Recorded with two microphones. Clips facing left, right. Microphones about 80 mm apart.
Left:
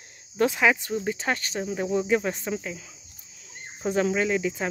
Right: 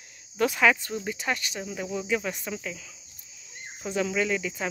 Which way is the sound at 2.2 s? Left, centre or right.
Left.